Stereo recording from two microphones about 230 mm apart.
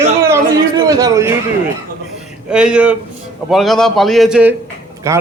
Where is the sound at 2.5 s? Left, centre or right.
Centre.